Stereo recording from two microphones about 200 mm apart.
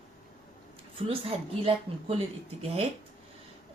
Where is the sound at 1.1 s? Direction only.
25° right (ahead or behind).